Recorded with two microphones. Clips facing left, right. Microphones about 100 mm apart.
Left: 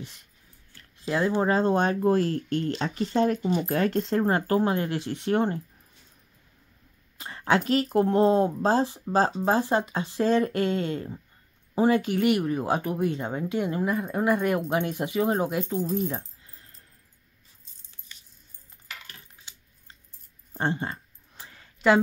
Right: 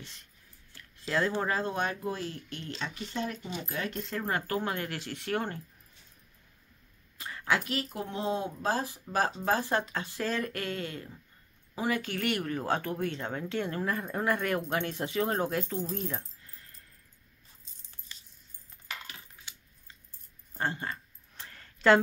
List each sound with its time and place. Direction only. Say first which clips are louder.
1.0 s speech: left 4 dB; 15° left (ahead or behind)
1.3 s speech: left 8 dB; 30° left (ahead or behind)
2.0 s speech: left 12 dB; 50° left (ahead or behind)
4.0 s speech: left 9 dB; 30° left (ahead or behind)
7.2 s speech: left 6 dB; 30° left (ahead or behind)
7.9 s speech: left 14 dB; 50° left (ahead or behind)
8.5 s speech: left 8 dB; 25° left (ahead or behind); by 16.1 s 10° left (ahead or behind)
16.1 s keys jangling: left 5 dB; 20° left (ahead or behind)
20.5 s a sound: left 5 dB; 25° left (ahead or behind)
21.5 s a sound: left 1 dB; 10° left (ahead or behind)